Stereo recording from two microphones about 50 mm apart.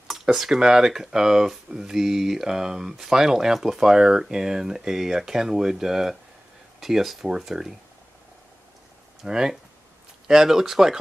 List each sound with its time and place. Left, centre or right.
0.1 s speech: centre
9.2 s speech: centre